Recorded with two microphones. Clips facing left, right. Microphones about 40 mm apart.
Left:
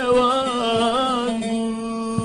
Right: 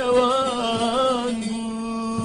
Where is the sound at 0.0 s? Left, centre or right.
Centre.